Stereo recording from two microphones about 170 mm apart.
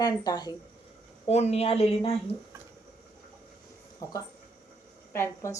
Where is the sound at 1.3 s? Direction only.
40° left (ahead or behind).